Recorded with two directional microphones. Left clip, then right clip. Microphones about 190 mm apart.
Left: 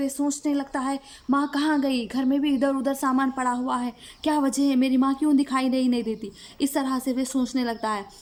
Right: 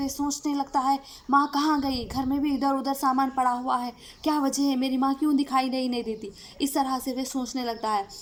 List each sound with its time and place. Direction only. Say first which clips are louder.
0.3 s speech: left 2 dB; 25° left (ahead or behind)